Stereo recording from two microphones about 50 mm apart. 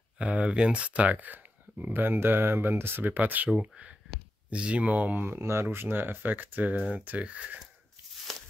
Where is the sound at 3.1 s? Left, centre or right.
Right.